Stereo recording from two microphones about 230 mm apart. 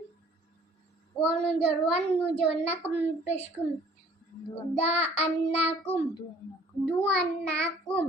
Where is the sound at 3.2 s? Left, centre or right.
Left.